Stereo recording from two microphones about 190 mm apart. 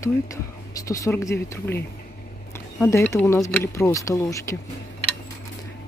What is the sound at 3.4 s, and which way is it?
Speech, 15° left (ahead or behind).